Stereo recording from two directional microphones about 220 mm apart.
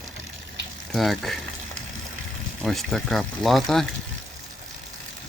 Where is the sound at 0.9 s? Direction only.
Centre (ahead or behind).